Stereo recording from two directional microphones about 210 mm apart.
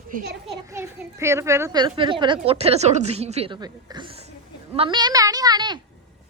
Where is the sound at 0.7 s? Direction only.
15° right (ahead or behind).